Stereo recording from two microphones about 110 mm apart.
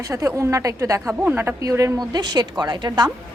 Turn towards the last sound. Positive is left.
turn(degrees=-40)  # may be behind; listen again after turning